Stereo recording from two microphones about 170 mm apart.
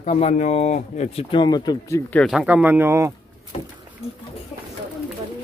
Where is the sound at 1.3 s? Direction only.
25° left (ahead or behind).